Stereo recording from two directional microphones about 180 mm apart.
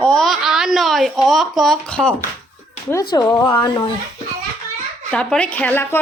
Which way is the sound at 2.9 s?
20° left (ahead or behind).